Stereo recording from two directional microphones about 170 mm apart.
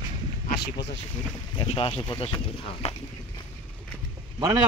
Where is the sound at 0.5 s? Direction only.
85° left.